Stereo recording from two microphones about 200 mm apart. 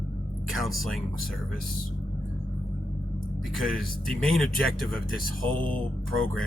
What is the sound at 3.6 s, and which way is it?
Speech, centre (ahead or behind).